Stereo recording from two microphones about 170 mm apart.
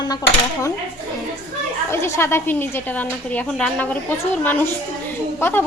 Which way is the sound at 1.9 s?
15° left (ahead or behind).